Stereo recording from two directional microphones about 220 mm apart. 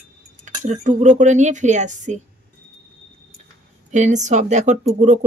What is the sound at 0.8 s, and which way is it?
Speech, 35° right (ahead or behind).